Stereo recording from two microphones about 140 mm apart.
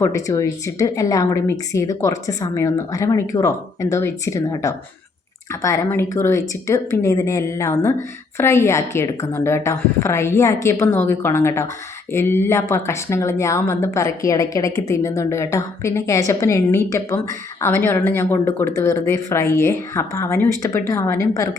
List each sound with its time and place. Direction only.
0.0 s a woman's voice: 20° left (ahead or behind)